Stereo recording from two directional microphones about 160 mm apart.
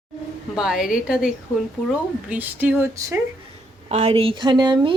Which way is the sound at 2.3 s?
10° right (ahead or behind).